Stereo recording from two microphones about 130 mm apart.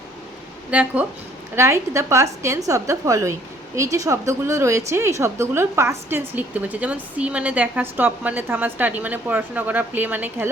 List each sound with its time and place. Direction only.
0.7 s a woman's voice: 10° right (ahead or behind)
1.5 s a woman's voice: 20° right (ahead or behind)